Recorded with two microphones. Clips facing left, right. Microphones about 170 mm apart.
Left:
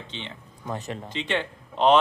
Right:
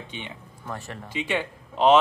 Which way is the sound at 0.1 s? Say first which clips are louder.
Even; 15° right (ahead or behind).